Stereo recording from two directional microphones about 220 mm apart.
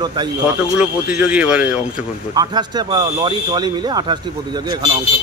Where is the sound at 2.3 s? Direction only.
20° right (ahead or behind).